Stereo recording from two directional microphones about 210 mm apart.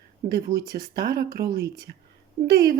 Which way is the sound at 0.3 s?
45° right (ahead or behind).